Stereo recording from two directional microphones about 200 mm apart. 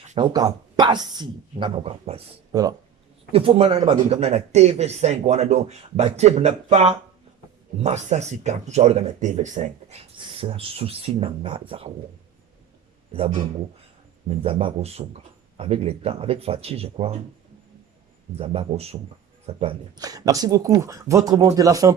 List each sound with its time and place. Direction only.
0.2 s a man's voice: 20° right (ahead or behind)
2.5 s a man's voice: 20° right (ahead or behind)
14.3 s a man's voice: 30° right (ahead or behind)
18.3 s a man's voice: 30° right (ahead or behind)
20.0 s speech: 20° right (ahead or behind)